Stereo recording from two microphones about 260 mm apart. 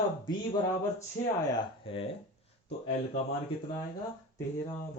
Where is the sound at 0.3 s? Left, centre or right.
Centre.